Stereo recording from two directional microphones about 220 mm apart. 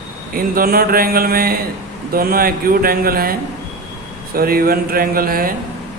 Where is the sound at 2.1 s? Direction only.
40° right (ahead or behind).